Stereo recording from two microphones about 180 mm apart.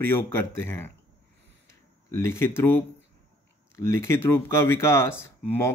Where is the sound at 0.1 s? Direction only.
15° left (ahead or behind).